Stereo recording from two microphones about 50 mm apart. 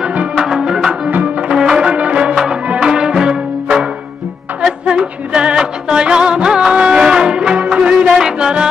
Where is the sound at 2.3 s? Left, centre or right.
Centre.